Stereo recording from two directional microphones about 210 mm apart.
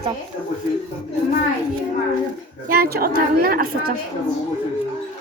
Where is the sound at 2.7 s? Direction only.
45° right (ahead or behind).